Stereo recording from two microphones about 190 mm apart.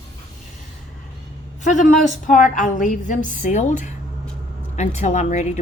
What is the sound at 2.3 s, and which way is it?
A woman's voice, 45° left (ahead or behind).